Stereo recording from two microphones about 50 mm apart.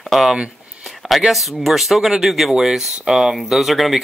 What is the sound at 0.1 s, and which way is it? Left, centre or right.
Speech, centre.